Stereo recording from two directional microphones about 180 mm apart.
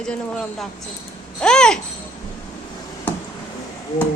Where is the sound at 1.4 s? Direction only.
5° left (ahead or behind).